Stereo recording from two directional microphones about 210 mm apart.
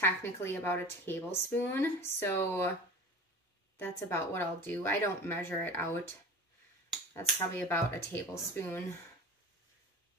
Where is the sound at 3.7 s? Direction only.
10° left (ahead or behind).